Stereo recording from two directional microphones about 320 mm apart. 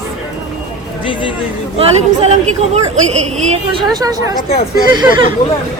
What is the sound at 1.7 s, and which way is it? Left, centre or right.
A woman's voice, centre.